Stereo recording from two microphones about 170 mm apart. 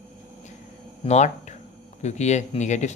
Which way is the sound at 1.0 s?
40° left (ahead or behind).